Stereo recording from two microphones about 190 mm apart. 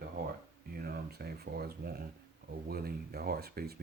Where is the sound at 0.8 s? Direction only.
55° right (ahead or behind).